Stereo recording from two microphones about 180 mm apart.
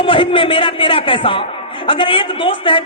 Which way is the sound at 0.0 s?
30° left (ahead or behind).